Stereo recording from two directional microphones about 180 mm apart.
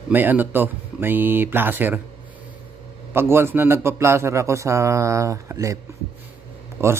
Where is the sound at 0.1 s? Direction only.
10° right (ahead or behind).